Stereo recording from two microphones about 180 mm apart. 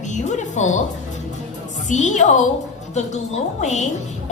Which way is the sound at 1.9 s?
40° left (ahead or behind).